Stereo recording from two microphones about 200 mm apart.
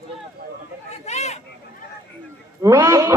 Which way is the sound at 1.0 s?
35° left (ahead or behind).